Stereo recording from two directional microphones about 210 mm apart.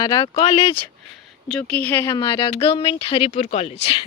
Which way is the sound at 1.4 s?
5° left (ahead or behind).